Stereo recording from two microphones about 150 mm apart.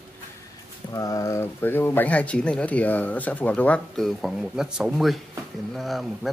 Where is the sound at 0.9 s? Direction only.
20° left (ahead or behind).